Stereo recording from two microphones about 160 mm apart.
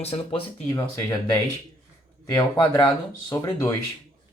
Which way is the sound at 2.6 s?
5° left (ahead or behind).